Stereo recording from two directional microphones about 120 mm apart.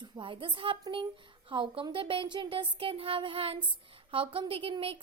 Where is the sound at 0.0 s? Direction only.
45° right (ahead or behind).